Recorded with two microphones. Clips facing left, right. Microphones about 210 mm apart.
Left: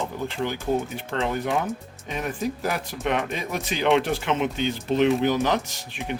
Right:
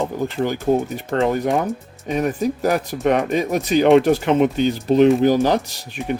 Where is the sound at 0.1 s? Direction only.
40° right (ahead or behind).